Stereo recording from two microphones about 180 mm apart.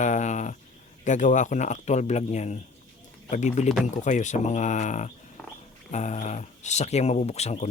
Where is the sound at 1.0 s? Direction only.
45° left (ahead or behind).